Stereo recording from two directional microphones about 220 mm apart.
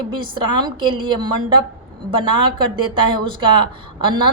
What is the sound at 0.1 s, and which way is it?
A woman's voice, 20° right (ahead or behind).